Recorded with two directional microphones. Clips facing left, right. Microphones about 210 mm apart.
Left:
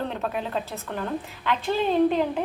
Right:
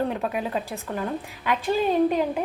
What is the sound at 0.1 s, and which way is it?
A woman's voice, 10° right (ahead or behind).